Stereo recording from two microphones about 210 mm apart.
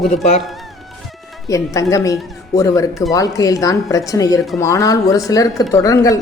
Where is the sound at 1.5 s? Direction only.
15° left (ahead or behind).